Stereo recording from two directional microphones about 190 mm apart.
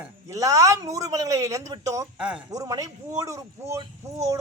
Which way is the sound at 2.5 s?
20° right (ahead or behind).